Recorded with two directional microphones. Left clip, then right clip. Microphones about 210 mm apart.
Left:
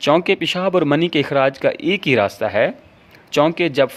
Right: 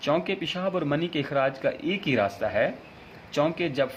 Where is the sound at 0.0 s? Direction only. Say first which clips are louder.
Left 10 dB; 50° left (ahead or behind).